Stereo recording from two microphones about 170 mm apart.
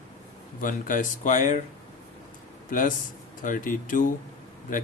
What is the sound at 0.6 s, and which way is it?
A man's voice, 50° left (ahead or behind).